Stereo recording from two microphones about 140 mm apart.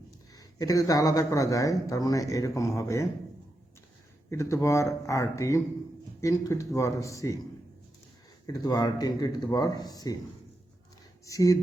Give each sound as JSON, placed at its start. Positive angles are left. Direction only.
{"t": 0.3, "sound": "speech", "side_deg": 25}
{"t": 4.3, "sound": "speech", "side_deg": 20}
{"t": 8.4, "sound": "speech", "side_deg": 25}
{"t": 11.3, "sound": "speech", "side_deg": 25}